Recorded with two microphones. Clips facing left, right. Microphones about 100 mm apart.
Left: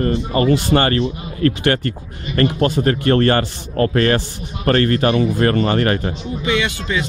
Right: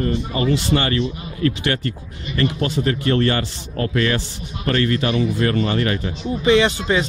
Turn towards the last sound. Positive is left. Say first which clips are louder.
# right 4 dB
turn(degrees=-35)  # may be behind; listen again after turning